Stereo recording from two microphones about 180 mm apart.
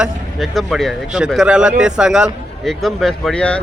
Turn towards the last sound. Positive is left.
turn(degrees=5)  # may be behind; listen again after turning